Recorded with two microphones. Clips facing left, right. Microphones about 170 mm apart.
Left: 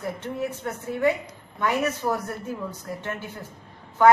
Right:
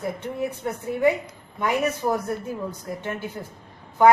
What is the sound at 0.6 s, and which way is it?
A woman's voice, 20° right (ahead or behind).